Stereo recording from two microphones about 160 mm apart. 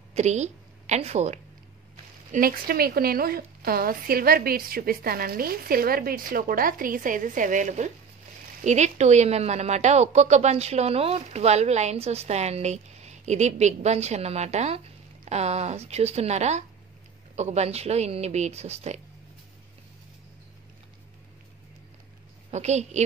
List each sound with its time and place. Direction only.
0.1 s a woman's voice: 45° right (ahead or behind)
2.3 s a woman's voice: 65° right (ahead or behind); by 18.9 s 40° right (ahead or behind)
22.5 s a woman's voice: 45° right (ahead or behind)